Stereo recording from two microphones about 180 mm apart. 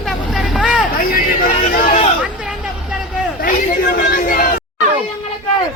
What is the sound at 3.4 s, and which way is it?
Chatter, 50° left (ahead or behind).